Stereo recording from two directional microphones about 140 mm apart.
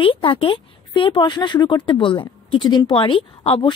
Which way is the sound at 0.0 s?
40° left (ahead or behind).